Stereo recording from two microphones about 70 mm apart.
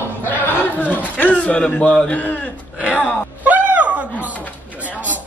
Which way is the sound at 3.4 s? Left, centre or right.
Right.